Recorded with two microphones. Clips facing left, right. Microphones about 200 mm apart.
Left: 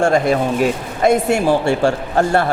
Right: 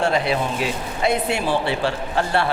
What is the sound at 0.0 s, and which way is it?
A man's voice, 45° left (ahead or behind).